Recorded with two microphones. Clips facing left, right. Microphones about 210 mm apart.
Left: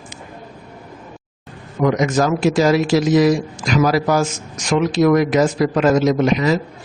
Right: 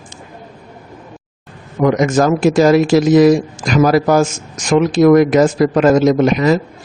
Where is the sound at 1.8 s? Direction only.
50° right (ahead or behind).